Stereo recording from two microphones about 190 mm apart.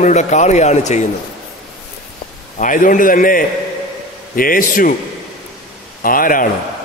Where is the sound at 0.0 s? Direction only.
40° left (ahead or behind).